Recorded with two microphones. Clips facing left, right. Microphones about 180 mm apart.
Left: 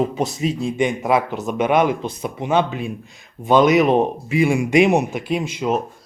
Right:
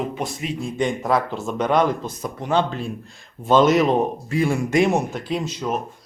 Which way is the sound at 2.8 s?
Centre (ahead or behind).